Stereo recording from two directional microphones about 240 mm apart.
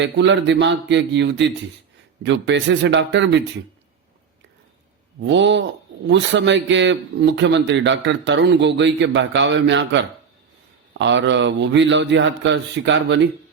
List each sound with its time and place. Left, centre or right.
0.0 s a man's voice: right
5.2 s a man's voice: right